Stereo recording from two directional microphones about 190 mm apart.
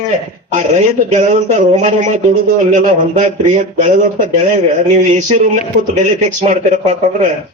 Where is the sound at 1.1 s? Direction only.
40° right (ahead or behind).